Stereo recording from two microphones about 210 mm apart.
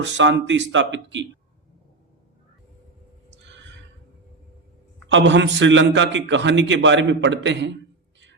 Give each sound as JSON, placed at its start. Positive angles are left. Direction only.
{"t": 0.0, "sound": "a man's voice", "side_deg": -60}
{"t": 5.0, "sound": "a man's voice", "side_deg": -60}